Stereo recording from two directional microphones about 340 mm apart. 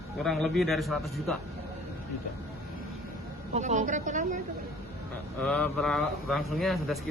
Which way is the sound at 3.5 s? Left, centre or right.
Right.